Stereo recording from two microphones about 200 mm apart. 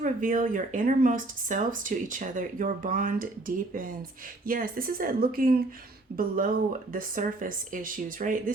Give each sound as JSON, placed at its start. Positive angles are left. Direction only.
{"t": 0.0, "sound": "speech", "side_deg": -40}